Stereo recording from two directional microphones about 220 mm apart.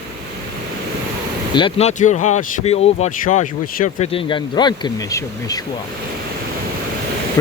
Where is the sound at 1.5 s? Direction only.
25° left (ahead or behind).